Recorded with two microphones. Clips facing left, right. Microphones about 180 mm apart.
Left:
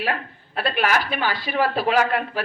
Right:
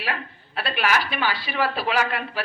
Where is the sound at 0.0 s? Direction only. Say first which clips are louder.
Left 4 dB; 45° left (ahead or behind).